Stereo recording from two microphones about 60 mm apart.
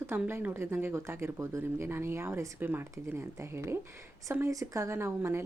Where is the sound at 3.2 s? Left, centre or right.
Right.